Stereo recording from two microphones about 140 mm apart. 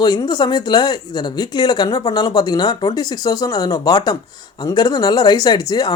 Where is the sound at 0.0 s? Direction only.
30° left (ahead or behind).